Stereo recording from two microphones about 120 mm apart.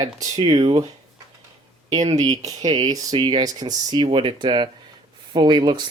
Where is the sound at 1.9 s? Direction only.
30° right (ahead or behind).